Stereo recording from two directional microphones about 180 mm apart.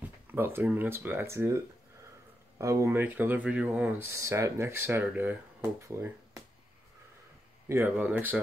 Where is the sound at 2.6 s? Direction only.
15° right (ahead or behind).